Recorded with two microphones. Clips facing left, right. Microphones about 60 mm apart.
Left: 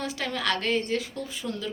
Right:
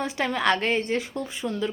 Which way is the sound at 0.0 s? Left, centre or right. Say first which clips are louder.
Right 5 dB; right.